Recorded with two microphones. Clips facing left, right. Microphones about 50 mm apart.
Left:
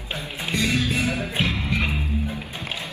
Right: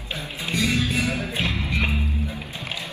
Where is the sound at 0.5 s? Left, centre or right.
Left.